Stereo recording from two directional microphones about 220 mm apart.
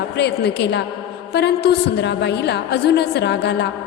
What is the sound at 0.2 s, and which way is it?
A woman's voice, 50° left (ahead or behind).